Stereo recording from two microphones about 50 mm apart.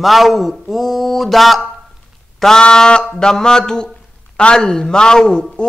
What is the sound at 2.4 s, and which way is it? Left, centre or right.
Speech, centre.